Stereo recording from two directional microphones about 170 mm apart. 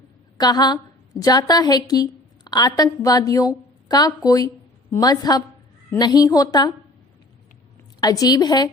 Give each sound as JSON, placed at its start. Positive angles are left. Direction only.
{"t": 0.3, "sound": "a woman's voice", "side_deg": 25}
{"t": 8.0, "sound": "a woman's voice", "side_deg": 20}